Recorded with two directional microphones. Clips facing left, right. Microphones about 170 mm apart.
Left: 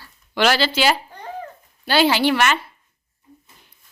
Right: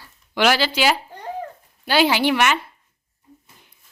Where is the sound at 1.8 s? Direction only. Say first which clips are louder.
Left 1 dB; 15° right (ahead or behind).